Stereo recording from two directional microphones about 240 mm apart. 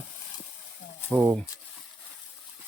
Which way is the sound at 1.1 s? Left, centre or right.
Centre.